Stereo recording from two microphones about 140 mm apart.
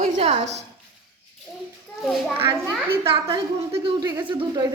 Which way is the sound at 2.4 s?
20° right (ahead or behind).